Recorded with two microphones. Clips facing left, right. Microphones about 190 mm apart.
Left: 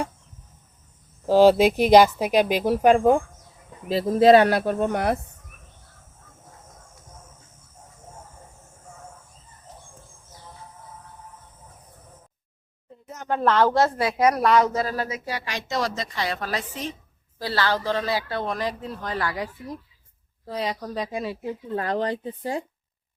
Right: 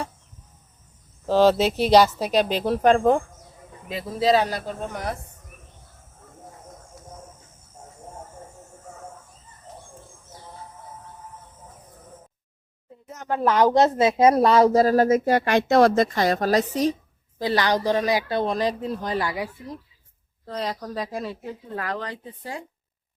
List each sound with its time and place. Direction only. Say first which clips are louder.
1.3 s speech: left 3 dB; 10° left (ahead or behind)
3.8 s speech: left 8 dB; 35° left (ahead or behind)
4.2 s speech: left 6 dB; 60° left (ahead or behind)
13.2 s speech: right 1 dB; 10° right (ahead or behind); by 16.9 s 40° right (ahead or behind)
17.3 s speech: right 3 dB; 15° right (ahead or behind)
20.5 s speech: left 1 dB; 5° left (ahead or behind)
21.8 s speech: left 6 dB; 30° left (ahead or behind)